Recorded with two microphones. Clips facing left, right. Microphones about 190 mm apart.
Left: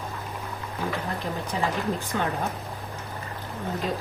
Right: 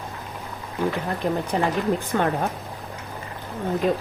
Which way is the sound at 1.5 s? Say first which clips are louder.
Right 2 dB; 60° right (ahead or behind).